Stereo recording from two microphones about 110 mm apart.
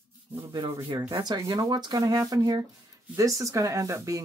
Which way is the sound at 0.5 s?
45° right (ahead or behind).